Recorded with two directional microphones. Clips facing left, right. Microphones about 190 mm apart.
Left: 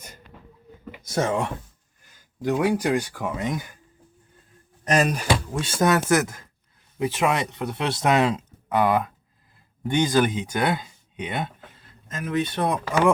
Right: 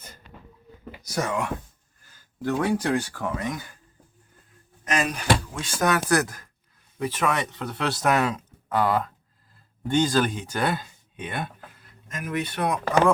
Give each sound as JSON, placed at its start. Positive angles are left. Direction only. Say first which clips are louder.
{"t": 0.9, "sound": "speech", "louder": "left 4 dB", "side_deg": 25}
{"t": 2.0, "sound": "speech", "louder": "left 2 dB", "side_deg": 15}
{"t": 4.9, "sound": "speech", "louder": "left 5 dB", "side_deg": 40}
{"t": 5.6, "sound": "speech", "louder": "left 3 dB", "side_deg": 25}